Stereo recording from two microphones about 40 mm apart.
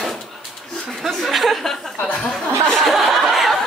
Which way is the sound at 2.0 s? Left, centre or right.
Left.